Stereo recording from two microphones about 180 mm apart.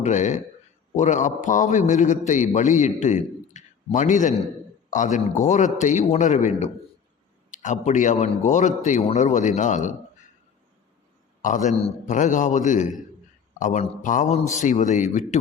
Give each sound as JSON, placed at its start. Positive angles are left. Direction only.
{"t": 0.0, "sound": "a man's voice", "side_deg": 40}
{"t": 11.4, "sound": "a man's voice", "side_deg": 45}